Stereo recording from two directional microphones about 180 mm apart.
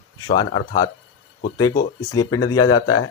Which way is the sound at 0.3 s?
25° left (ahead or behind).